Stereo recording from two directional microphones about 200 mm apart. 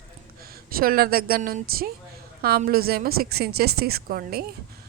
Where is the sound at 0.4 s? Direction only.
50° right (ahead or behind).